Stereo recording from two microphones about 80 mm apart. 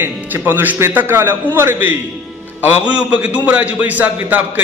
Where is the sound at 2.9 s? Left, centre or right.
Centre.